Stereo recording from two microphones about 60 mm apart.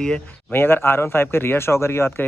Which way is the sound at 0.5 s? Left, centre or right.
Left.